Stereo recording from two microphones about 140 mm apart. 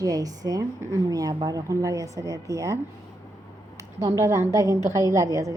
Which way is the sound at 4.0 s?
20° right (ahead or behind).